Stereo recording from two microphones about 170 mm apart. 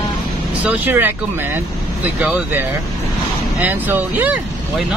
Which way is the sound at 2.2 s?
10° right (ahead or behind).